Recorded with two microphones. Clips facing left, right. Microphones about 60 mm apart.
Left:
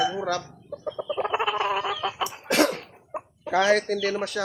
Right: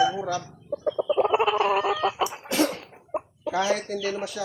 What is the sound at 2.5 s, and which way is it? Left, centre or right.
Cough, left.